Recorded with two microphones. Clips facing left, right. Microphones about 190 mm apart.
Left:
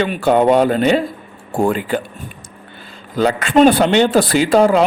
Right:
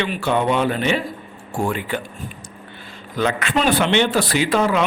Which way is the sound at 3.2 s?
35° left (ahead or behind).